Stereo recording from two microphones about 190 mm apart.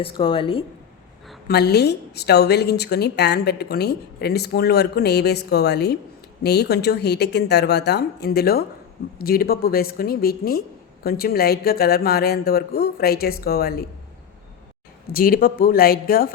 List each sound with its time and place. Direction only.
0.0 s a woman's voice: 30° left (ahead or behind)
1.5 s a woman's voice: 60° left (ahead or behind)
15.1 s speech: 50° left (ahead or behind)